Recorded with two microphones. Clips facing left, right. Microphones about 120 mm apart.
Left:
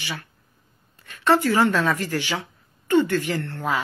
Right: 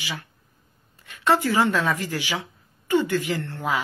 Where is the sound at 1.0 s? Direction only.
15° right (ahead or behind).